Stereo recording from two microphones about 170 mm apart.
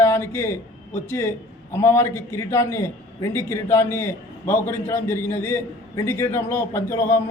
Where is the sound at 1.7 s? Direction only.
15° left (ahead or behind).